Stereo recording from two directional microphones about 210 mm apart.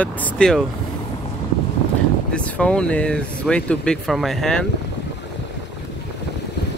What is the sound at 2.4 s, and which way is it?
Speech, 5° left (ahead or behind).